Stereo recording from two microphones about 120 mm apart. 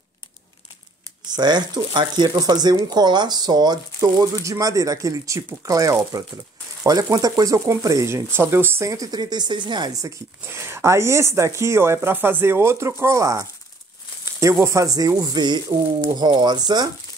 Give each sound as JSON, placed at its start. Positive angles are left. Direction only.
{"t": 1.2, "sound": "speech", "side_deg": -35}
{"t": 14.6, "sound": "speech", "side_deg": -25}